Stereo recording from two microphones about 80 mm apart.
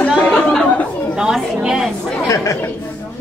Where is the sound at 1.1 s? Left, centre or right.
Centre.